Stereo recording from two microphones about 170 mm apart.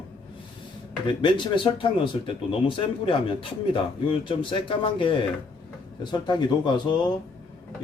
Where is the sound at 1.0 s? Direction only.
30° left (ahead or behind).